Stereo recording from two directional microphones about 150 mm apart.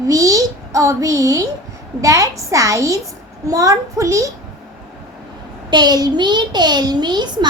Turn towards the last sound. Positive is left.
turn(degrees=-30)  # may be behind; listen again after turning